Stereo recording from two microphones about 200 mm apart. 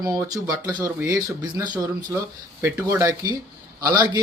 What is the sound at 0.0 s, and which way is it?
Speech, 20° right (ahead or behind).